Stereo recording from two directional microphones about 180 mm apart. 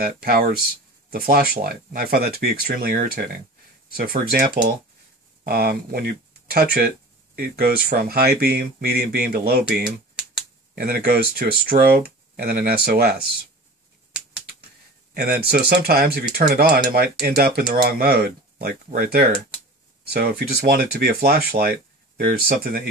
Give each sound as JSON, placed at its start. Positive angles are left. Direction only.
{"t": 0.0, "sound": "speech", "side_deg": -55}
{"t": 9.8, "sound": "typing", "side_deg": 0}
{"t": 10.7, "sound": "speech", "side_deg": -55}
{"t": 15.1, "sound": "speech", "side_deg": -60}